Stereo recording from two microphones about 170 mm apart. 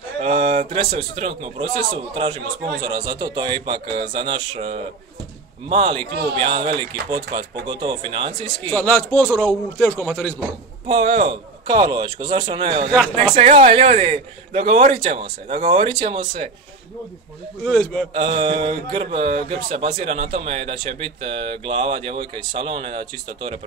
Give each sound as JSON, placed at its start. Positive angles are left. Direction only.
{"t": 0.2, "sound": "a sound", "side_deg": -30}
{"t": 0.7, "sound": "a man's voice", "side_deg": -30}
{"t": 8.6, "sound": "a man's voice", "side_deg": 10}
{"t": 10.9, "sound": "a man's voice", "side_deg": -35}
{"t": 12.9, "sound": "a man's voice", "side_deg": 5}
{"t": 13.2, "sound": "speech", "side_deg": -35}
{"t": 17.6, "sound": "a man's voice", "side_deg": 5}
{"t": 18.1, "sound": "a man's voice", "side_deg": -30}